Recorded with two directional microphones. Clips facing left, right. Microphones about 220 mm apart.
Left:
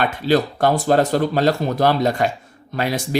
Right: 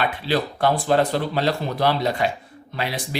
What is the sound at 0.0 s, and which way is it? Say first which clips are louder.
Speech: left 5 dB; 45° left (ahead or behind).